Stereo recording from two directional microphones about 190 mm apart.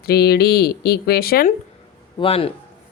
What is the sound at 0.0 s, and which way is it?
Speech, 55° left (ahead or behind).